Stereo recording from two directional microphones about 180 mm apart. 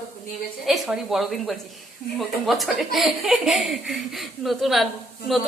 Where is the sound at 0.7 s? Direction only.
Centre (ahead or behind).